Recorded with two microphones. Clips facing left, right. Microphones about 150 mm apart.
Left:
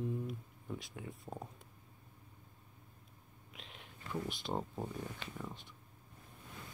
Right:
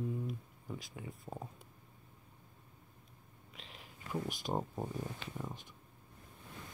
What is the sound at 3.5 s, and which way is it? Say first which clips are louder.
Whispering: even; centre (ahead or behind).